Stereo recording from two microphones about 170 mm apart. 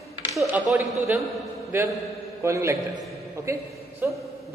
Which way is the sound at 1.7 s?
15° right (ahead or behind).